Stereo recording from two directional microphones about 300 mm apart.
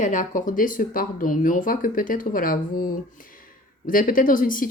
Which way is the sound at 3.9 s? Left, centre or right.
Left.